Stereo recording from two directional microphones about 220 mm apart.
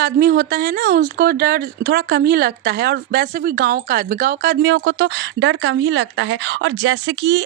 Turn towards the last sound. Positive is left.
turn(degrees=-55)  # may be behind; listen again after turning